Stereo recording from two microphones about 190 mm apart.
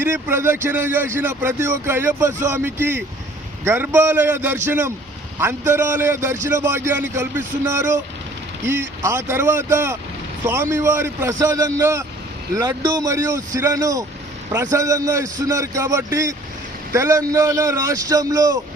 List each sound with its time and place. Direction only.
0.0 s a man's voice: 10° right (ahead or behind)